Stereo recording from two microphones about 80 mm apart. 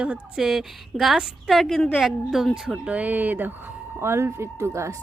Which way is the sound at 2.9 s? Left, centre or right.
Right.